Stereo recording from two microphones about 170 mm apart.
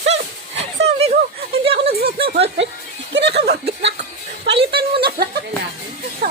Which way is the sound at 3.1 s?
85° right.